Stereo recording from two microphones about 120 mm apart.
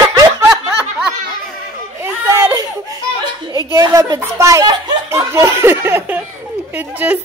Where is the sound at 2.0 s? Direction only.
20° right (ahead or behind).